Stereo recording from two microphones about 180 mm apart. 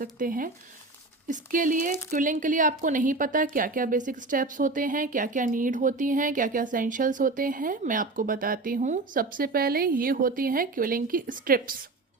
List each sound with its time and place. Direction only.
0.0 s speech: 50° right (ahead or behind)